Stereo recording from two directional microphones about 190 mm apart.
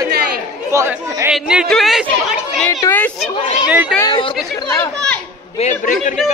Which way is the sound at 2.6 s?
10° left (ahead or behind).